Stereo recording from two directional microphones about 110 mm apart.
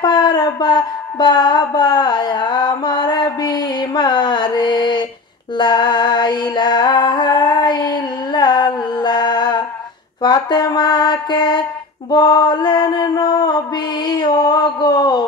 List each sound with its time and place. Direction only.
0.0 s music: 45° left (ahead or behind)
10.2 s a sound: 40° left (ahead or behind)
12.1 s mantra: 40° left (ahead or behind)